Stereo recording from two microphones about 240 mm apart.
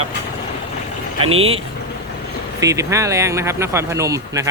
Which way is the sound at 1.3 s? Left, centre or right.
Right.